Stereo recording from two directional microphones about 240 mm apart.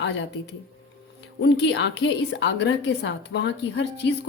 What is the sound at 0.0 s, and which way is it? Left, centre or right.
A woman's voice, left.